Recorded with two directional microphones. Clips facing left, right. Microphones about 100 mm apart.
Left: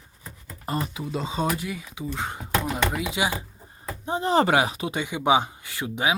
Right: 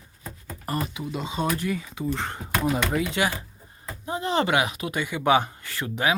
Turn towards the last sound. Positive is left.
turn(degrees=15)  # may be behind; listen again after turning